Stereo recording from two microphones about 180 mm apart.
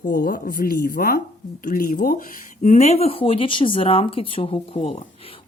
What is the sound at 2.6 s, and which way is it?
Speech, 40° left (ahead or behind).